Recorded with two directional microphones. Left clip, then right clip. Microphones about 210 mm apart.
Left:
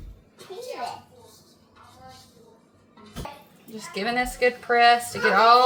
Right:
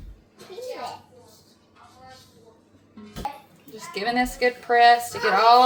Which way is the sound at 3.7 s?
20° right (ahead or behind).